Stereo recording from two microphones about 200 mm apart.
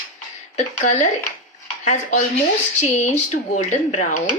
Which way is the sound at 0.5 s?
35° left (ahead or behind).